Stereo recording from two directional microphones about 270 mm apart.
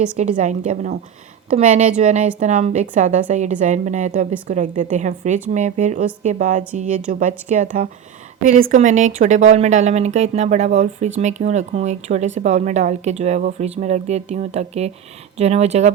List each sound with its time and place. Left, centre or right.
0.2 s a woman's voice: right